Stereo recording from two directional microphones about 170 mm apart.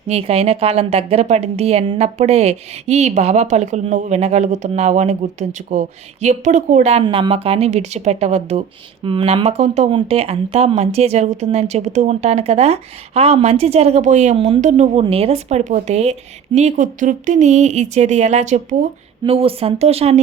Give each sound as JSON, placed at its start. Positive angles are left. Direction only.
{"t": 0.1, "sound": "a woman's voice", "side_deg": -35}
{"t": 15.0, "sound": "a woman's voice", "side_deg": -35}
{"t": 19.2, "sound": "a woman's voice", "side_deg": -35}